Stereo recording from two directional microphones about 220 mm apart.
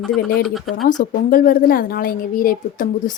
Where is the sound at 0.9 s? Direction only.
40° left (ahead or behind).